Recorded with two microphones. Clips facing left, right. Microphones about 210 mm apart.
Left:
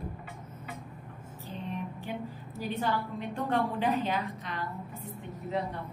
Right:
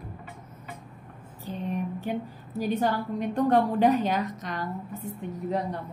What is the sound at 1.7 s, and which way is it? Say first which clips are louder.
A woman's voice: right 7 dB; 45° right (ahead or behind).